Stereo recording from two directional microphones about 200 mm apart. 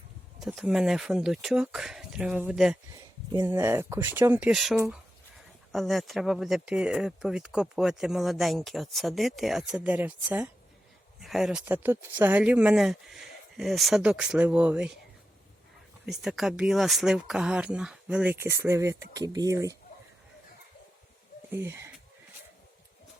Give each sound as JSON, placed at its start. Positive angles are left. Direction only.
{"t": 0.3, "sound": "speech", "side_deg": 0}
{"t": 16.0, "sound": "speech", "side_deg": 0}
{"t": 21.5, "sound": "speech", "side_deg": -10}